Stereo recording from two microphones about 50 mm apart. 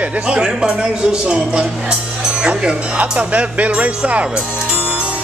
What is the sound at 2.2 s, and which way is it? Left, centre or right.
Music, centre.